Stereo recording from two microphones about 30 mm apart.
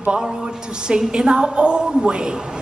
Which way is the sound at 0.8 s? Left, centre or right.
Right.